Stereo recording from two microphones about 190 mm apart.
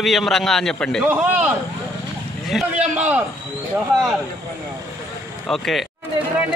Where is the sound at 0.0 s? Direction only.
Centre (ahead or behind).